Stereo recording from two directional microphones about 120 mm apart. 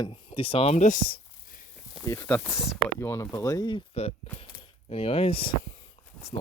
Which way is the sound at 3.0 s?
25° left (ahead or behind).